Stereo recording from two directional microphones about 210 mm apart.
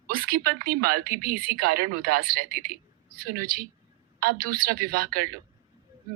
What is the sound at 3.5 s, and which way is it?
Speech, 45° right (ahead or behind).